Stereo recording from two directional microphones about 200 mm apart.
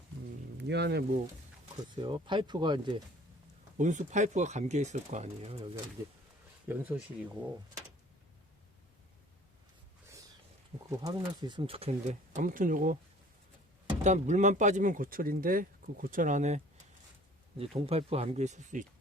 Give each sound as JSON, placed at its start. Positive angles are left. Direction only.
{"t": 0.5, "sound": "speech", "side_deg": -55}
{"t": 2.0, "sound": "speech", "side_deg": -25}
{"t": 3.8, "sound": "speech", "side_deg": -40}
{"t": 6.7, "sound": "speech", "side_deg": -10}
{"t": 10.8, "sound": "speech", "side_deg": -20}
{"t": 14.0, "sound": "speech", "side_deg": -35}
{"t": 17.6, "sound": "speech", "side_deg": -30}